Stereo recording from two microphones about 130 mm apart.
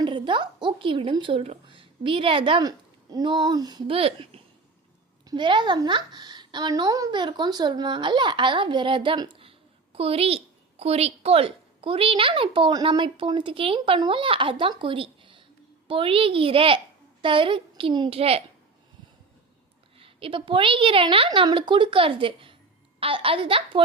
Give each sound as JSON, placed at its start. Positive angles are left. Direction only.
{"t": 0.0, "sound": "a woman's voice", "side_deg": -40}
{"t": 5.2, "sound": "a woman's voice", "side_deg": -35}
{"t": 20.0, "sound": "a woman's voice", "side_deg": -45}